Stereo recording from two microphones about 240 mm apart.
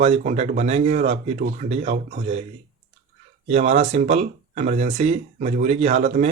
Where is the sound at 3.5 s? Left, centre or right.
Right.